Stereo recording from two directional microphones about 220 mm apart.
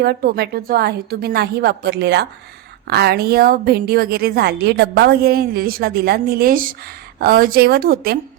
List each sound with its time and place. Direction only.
0.0 s a woman's voice: 45° right (ahead or behind)